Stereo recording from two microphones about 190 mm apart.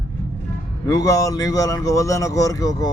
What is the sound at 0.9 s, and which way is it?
A man's voice, 15° left (ahead or behind).